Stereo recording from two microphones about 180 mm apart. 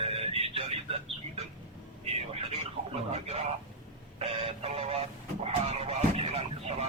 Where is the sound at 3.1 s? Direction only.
35° right (ahead or behind).